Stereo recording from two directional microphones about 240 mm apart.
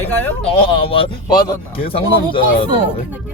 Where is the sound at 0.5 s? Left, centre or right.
Left.